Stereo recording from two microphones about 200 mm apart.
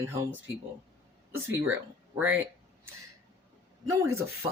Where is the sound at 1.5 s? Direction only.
10° right (ahead or behind).